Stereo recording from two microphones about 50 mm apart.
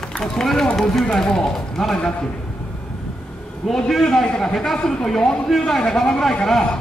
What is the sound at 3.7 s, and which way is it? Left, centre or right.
A man's voice, centre.